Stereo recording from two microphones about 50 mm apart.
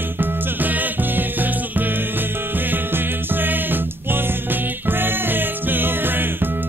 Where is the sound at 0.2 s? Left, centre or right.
Right.